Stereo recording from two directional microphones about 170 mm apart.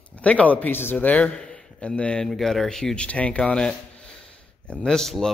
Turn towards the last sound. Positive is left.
turn(degrees=0)  # may be behind; listen again after turning